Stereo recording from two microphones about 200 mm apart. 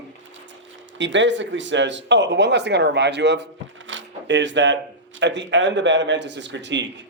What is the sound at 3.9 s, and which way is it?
Zipper, 65° right (ahead or behind).